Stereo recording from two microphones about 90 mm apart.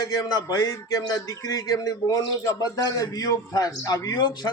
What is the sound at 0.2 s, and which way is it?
A man's voice, 45° left (ahead or behind).